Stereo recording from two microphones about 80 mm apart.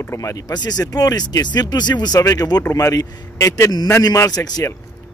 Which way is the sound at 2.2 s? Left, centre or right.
Left.